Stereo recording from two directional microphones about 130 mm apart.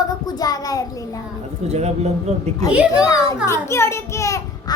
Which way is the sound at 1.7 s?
55° right (ahead or behind).